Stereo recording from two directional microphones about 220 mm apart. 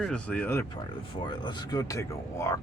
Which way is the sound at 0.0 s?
5° left (ahead or behind).